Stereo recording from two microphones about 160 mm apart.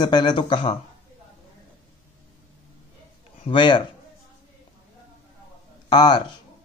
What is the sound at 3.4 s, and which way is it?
Speech, 30° left (ahead or behind).